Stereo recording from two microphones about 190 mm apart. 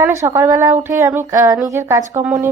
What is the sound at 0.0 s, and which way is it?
A woman's voice, 15° right (ahead or behind).